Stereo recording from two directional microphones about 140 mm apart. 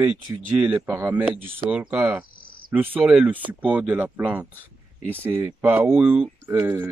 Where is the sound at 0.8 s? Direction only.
20° right (ahead or behind).